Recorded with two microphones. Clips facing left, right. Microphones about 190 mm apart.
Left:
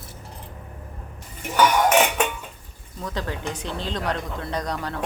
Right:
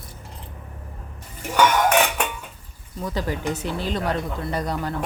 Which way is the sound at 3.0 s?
10° right (ahead or behind).